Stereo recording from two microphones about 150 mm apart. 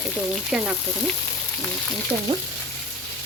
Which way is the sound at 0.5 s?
5° right (ahead or behind).